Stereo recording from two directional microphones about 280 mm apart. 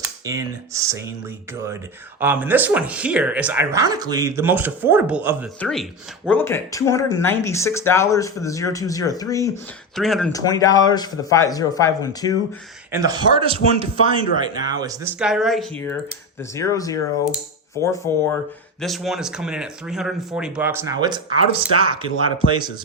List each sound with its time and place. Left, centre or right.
0.0 s speech: centre
2.2 s speech: centre
9.9 s speech: centre
10.3 s speech: centre
12.9 s speech: centre
18.8 s speech: centre